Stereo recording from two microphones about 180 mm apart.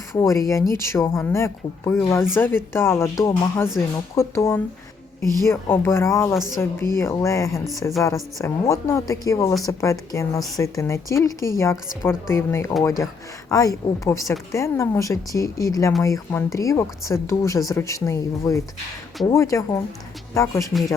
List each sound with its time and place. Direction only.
0.1 s a woman's voice: 15° left (ahead or behind)